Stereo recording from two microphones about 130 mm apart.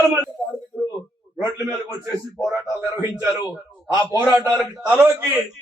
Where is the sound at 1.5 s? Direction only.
20° right (ahead or behind).